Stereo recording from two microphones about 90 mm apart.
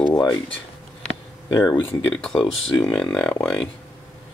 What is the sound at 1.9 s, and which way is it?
Speech, 15° left (ahead or behind).